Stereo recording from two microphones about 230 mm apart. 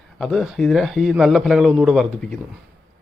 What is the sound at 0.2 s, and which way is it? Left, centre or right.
A man's voice, centre.